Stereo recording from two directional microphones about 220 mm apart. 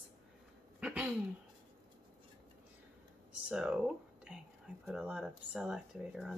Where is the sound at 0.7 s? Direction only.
5° right (ahead or behind).